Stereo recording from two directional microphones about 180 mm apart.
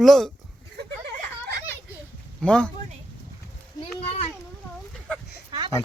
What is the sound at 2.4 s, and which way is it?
Speech, 5° left (ahead or behind).